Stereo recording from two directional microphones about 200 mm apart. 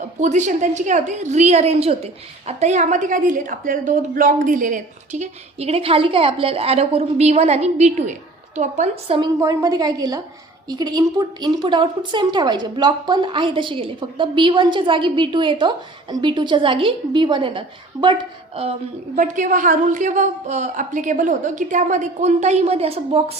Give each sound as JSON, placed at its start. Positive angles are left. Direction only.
{"t": 0.2, "sound": "a woman's voice", "side_deg": -35}
{"t": 19.1, "sound": "a woman's voice", "side_deg": -40}